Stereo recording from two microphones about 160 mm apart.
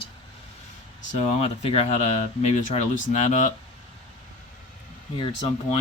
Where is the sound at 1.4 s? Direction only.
40° left (ahead or behind).